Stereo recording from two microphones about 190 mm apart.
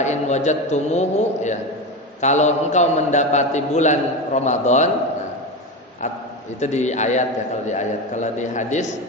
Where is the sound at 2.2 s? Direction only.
40° left (ahead or behind).